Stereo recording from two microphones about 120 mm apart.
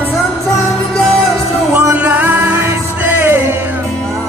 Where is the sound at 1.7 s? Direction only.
15° right (ahead or behind).